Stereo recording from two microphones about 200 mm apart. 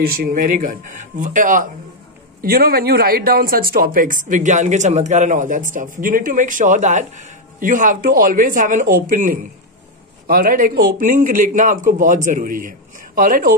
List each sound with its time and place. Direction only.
0.0 s a man's voice: 50° right (ahead or behind)